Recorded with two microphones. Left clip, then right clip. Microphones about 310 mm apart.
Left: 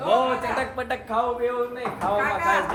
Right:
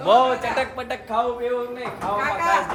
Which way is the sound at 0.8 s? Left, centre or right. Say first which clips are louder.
Right 1 dB; centre.